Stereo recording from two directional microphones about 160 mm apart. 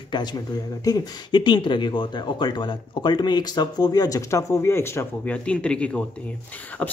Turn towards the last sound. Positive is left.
turn(degrees=10)  # may be behind; listen again after turning